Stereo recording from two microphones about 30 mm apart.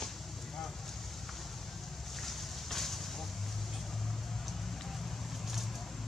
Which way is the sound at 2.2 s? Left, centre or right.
Centre.